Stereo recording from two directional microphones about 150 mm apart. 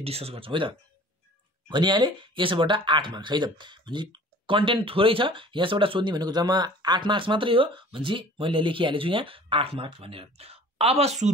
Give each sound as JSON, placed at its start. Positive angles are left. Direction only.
{"t": 0.0, "sound": "speech", "side_deg": -40}